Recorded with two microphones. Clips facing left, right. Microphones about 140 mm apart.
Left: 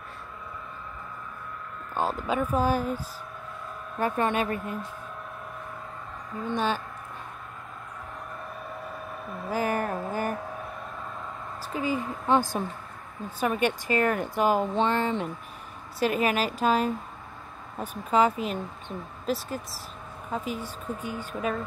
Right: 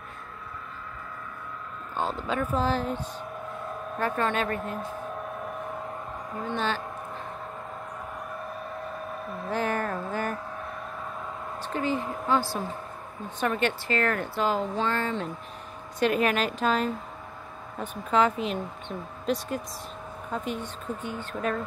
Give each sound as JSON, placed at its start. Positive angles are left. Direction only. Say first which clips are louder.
{"t": 2.0, "sound": "speech", "louder": "left 2 dB", "side_deg": 5}
{"t": 6.5, "sound": "speech", "louder": "left 2 dB", "side_deg": 10}
{"t": 9.4, "sound": "a sound", "louder": "left 1 dB", "side_deg": 5}
{"t": 11.7, "sound": "a woman's voice", "louder": "even", "side_deg": 10}
{"t": 16.0, "sound": "a woman's voice", "louder": "right 1 dB", "side_deg": 5}